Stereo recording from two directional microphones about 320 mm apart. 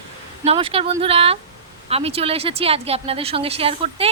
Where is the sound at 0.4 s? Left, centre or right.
Centre.